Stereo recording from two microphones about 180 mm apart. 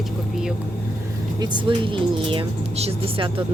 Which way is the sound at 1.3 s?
25° right (ahead or behind).